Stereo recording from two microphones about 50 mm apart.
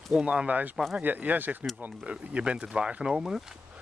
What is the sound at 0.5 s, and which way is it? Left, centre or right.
Speech, right.